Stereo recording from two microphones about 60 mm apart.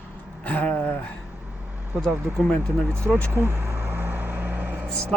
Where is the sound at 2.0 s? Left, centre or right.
Centre.